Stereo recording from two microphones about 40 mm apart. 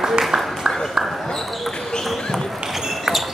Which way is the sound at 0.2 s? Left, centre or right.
Centre.